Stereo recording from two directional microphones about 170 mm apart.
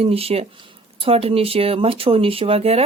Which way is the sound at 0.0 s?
35° right (ahead or behind).